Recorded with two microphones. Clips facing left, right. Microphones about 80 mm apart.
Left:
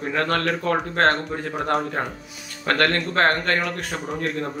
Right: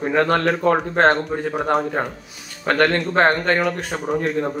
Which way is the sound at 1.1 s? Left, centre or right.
Centre.